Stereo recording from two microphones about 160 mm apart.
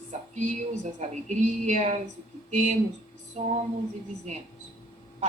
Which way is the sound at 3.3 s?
45° right (ahead or behind).